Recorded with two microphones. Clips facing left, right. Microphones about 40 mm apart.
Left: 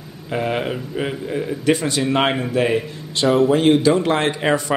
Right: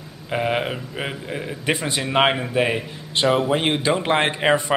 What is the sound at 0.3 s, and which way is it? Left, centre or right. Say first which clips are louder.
A man's voice: left 1 dB; centre.